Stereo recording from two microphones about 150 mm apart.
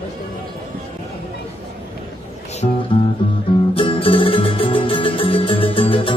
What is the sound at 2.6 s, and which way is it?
Speech, 40° left (ahead or behind).